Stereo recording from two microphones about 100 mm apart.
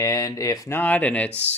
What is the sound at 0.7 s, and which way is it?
Speech, 15° left (ahead or behind).